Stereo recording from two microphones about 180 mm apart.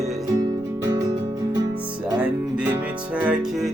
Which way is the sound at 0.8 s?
20° right (ahead or behind).